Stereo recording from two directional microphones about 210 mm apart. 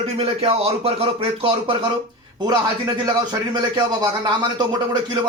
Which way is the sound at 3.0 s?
20° right (ahead or behind).